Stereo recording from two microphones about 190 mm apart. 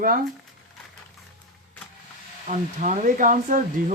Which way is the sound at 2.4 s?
40° right (ahead or behind).